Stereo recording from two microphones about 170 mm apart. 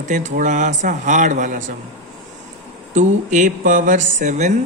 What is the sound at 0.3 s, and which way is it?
Speech, 45° right (ahead or behind).